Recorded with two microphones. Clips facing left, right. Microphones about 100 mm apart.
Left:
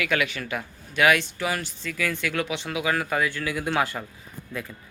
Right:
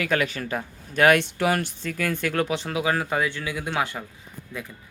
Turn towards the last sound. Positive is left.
turn(degrees=-20)  # may be behind; listen again after turning